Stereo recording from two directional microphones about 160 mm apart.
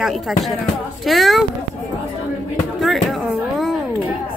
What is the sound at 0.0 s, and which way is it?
Speech, centre (ahead or behind).